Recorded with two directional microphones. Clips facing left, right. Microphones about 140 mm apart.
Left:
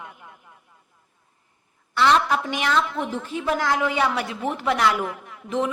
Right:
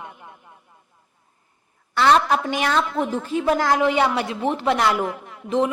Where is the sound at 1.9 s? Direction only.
45° right (ahead or behind).